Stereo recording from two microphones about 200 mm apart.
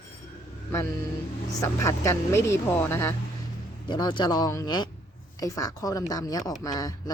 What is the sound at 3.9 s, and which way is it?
Speech, 25° left (ahead or behind).